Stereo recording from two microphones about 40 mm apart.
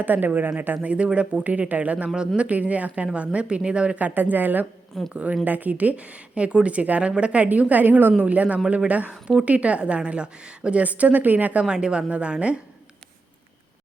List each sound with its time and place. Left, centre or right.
0.0 s a woman's voice: right
0.8 s a woman's voice: right
2.1 s a woman's voice: right
2.5 s a woman's voice: right
3.9 s a woman's voice: right
5.1 s a woman's voice: right
8.2 s a woman's voice: right
10.8 s a woman's voice: right
11.7 s a woman's voice: right